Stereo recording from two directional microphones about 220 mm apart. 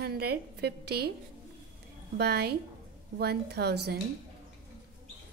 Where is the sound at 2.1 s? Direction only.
45° right (ahead or behind).